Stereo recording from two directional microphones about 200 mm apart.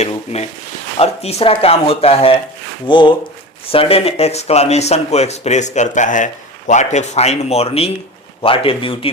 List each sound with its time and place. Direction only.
0.9 s speech: 30° left (ahead or behind)